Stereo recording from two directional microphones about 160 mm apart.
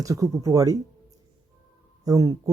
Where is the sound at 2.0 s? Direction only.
20° right (ahead or behind).